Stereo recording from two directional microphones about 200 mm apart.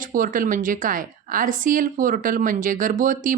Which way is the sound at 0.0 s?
40° right (ahead or behind).